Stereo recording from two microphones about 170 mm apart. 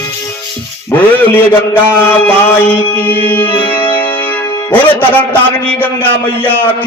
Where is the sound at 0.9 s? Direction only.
10° left (ahead or behind).